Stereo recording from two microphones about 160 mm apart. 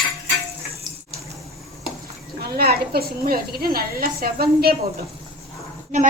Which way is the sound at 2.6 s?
75° right (ahead or behind).